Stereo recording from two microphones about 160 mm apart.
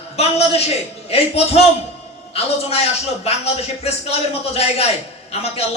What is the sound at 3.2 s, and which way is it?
A man's voice, 40° left (ahead or behind).